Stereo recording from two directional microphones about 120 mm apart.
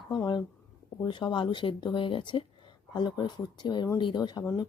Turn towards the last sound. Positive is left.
turn(degrees=35)  # may be behind; listen again after turning